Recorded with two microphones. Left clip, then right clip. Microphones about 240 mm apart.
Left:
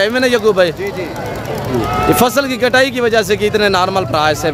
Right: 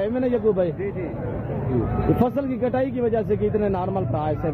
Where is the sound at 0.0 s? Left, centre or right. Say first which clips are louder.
Left 10 dB; centre.